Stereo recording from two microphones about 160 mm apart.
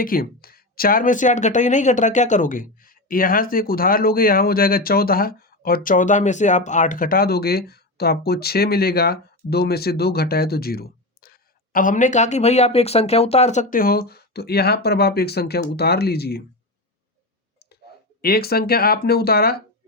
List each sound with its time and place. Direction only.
0.0 s speech: 65° left (ahead or behind); by 16.4 s 85° left
18.2 s speech: 70° left (ahead or behind)